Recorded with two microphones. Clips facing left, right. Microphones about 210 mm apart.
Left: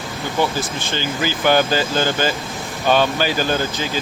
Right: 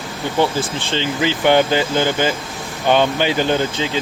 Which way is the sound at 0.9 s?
25° right (ahead or behind).